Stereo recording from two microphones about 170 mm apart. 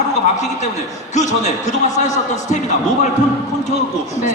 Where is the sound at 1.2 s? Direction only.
45° left (ahead or behind).